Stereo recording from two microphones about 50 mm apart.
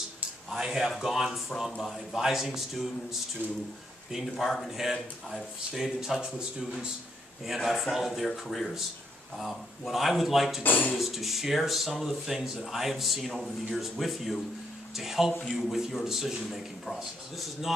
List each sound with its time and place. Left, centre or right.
0.5 s a man's voice: centre
6.3 s speech: centre
7.4 s speech: centre
10.6 s speech: left
11.0 s a man's voice: centre
16.8 s speech: centre